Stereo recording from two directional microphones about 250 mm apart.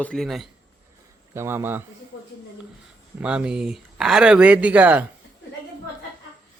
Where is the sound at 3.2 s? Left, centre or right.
Centre.